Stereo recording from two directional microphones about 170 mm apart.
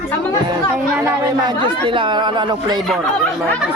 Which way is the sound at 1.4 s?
30° right (ahead or behind).